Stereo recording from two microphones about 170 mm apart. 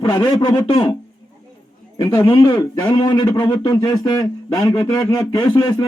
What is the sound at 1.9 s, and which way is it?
A man's voice, 20° left (ahead or behind).